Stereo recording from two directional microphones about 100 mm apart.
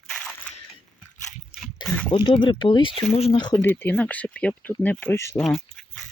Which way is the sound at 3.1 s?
90° left.